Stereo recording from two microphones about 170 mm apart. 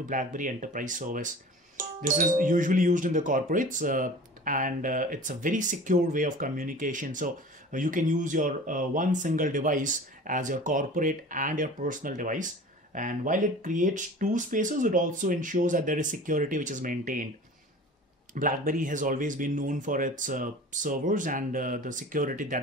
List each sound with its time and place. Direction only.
0.1 s speech: 50° right (ahead or behind)
18.3 s speech: 50° right (ahead or behind)